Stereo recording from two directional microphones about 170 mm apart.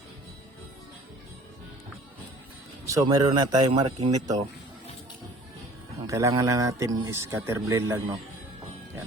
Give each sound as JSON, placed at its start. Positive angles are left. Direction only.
{"t": 2.8, "sound": "speech", "side_deg": -20}
{"t": 6.1, "sound": "speech", "side_deg": -20}